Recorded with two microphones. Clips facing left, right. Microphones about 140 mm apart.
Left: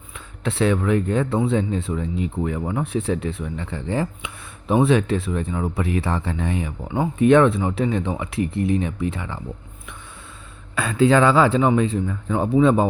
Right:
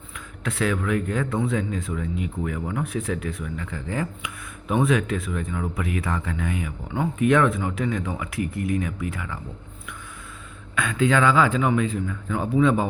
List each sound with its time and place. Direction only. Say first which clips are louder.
0.4 s speech: left 5 dB; 30° left (ahead or behind)
10.8 s speech: left 5 dB; 35° left (ahead or behind)